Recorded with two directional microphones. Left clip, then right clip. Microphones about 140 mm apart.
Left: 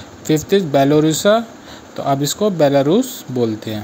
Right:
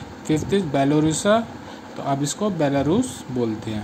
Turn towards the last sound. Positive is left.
turn(degrees=30)  # may be behind; listen again after turning